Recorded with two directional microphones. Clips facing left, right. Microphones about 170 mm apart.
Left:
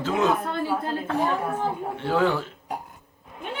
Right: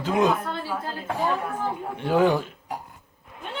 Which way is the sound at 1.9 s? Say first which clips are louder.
Right 3 dB; 15° right (ahead or behind).